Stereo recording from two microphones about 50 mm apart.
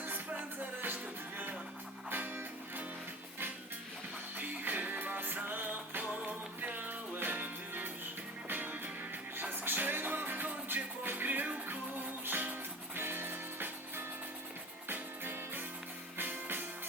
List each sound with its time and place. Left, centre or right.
0.0 s music: right
2.0 s music: right
4.4 s music: right